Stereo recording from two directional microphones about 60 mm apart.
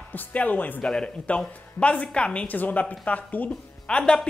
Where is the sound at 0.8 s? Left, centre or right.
Centre.